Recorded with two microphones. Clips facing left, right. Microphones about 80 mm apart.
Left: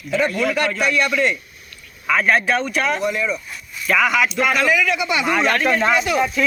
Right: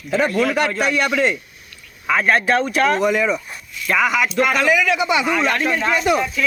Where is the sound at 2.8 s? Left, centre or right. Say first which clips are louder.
Right 4 dB; right.